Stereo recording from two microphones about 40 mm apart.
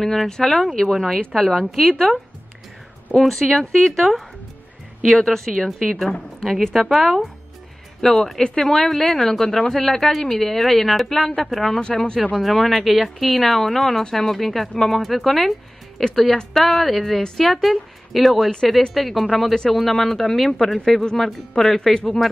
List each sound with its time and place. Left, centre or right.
0.0 s a woman's voice: centre
3.2 s a woman's voice: centre
19.5 s a woman's voice: centre